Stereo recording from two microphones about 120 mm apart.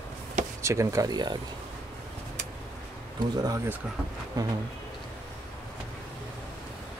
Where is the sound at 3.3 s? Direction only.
30° right (ahead or behind).